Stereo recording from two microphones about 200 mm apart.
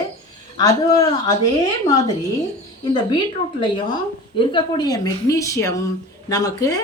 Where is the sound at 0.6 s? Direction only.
15° left (ahead or behind).